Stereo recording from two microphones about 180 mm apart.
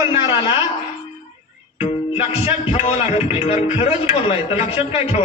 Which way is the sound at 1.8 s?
35° left (ahead or behind).